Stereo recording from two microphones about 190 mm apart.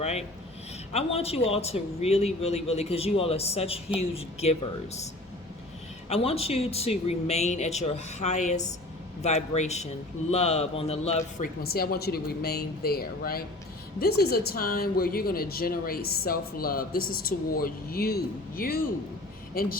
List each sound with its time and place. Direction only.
0.0 s speech: 35° left (ahead or behind)
6.1 s speech: 30° left (ahead or behind)
11.6 s a woman's voice: 55° left (ahead or behind)